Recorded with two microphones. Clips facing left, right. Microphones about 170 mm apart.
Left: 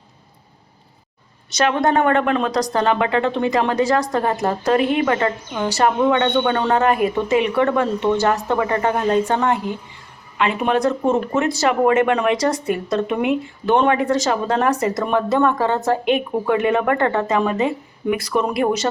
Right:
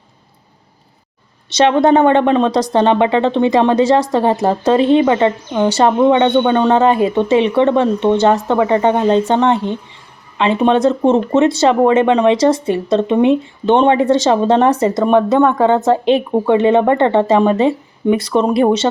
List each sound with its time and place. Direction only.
1.5 s speech: 30° right (ahead or behind)